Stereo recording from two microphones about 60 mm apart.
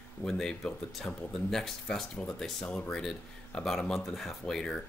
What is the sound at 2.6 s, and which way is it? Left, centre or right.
Speech, centre.